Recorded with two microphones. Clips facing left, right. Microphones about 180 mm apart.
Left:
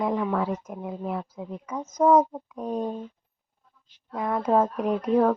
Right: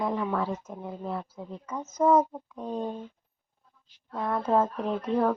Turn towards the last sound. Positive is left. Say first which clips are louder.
# left 4 dB
turn(degrees=10)  # may be behind; listen again after turning